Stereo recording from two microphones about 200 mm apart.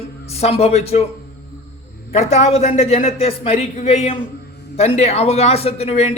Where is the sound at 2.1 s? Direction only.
30° left (ahead or behind).